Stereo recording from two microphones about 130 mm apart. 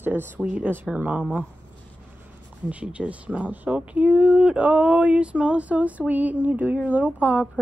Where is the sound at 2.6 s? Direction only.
10° right (ahead or behind).